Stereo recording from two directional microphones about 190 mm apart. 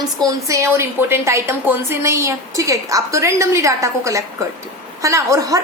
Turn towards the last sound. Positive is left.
turn(degrees=-20)  # may be behind; listen again after turning